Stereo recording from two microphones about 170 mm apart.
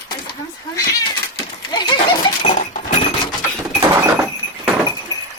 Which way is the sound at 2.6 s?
45° left (ahead or behind).